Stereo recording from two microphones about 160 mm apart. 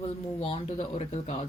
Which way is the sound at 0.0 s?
40° left (ahead or behind).